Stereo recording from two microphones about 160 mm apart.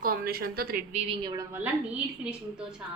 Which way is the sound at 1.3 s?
15° right (ahead or behind).